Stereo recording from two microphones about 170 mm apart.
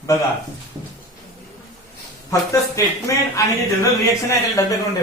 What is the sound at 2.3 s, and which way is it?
Speech, 20° left (ahead or behind).